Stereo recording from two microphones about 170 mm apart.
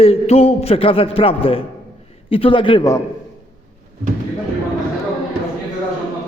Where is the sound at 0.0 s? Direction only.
35° left (ahead or behind).